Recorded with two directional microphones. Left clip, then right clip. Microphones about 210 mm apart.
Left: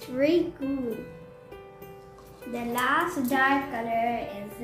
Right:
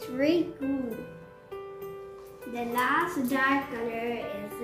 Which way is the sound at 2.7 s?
15° left (ahead or behind).